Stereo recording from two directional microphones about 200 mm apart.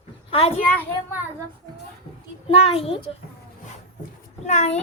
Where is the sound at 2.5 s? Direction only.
30° left (ahead or behind).